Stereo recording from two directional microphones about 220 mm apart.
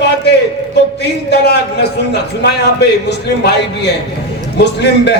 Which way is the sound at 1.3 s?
50° left (ahead or behind).